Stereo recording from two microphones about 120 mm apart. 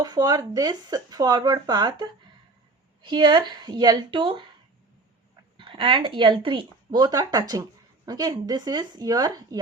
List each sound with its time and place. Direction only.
0.0 s speech: 35° right (ahead or behind)
5.5 s speech: 45° right (ahead or behind)